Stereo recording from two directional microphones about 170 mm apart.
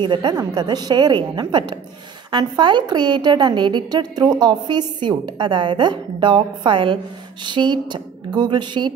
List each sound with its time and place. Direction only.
0.0 s a woman's voice: 25° right (ahead or behind)